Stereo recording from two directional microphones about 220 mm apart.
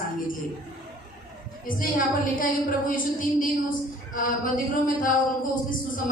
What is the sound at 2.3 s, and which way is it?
A woman's voice, 40° left (ahead or behind).